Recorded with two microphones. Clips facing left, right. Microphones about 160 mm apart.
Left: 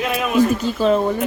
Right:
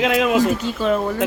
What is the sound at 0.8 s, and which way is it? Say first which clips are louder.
Speech: left 5 dB; 35° left (ahead or behind).